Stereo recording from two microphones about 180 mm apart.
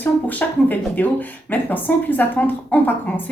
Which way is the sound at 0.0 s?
10° left (ahead or behind).